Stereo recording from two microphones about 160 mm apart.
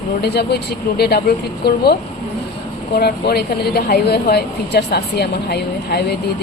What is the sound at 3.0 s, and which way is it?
Speech, 80° left.